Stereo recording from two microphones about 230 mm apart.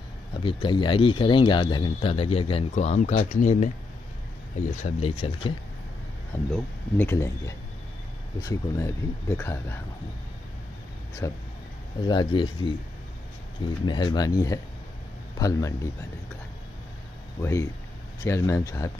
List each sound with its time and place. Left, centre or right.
0.4 s speech: left
4.8 s speech: left
6.3 s speech: centre
11.2 s speech: centre
13.8 s speech: centre
17.4 s speech: centre